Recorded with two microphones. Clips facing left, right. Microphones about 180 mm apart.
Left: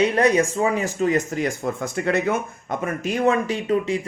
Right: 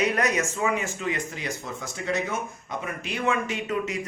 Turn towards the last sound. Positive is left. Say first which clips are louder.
# left 7 dB
turn(degrees=30)  # may be behind; listen again after turning